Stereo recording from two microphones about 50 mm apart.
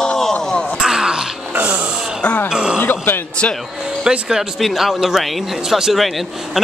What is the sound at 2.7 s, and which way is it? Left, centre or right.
Speech, left.